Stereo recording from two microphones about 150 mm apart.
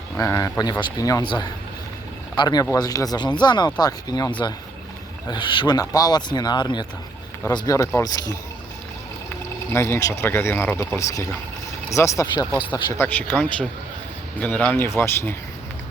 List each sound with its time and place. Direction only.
0.2 s speech: 20° left (ahead or behind)
5.3 s speech: 30° left (ahead or behind)
9.7 s speech: 15° left (ahead or behind)
12.9 s speech: 15° left (ahead or behind)